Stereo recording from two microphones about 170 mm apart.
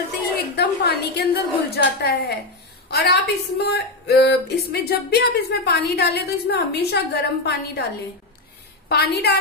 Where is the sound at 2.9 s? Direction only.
70° left (ahead or behind).